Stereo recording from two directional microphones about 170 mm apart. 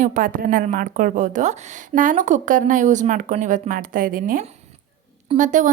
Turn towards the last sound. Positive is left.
turn(degrees=-50)  # may be behind; listen again after turning